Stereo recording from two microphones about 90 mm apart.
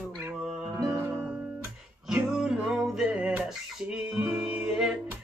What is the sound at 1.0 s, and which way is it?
Music, 25° right (ahead or behind).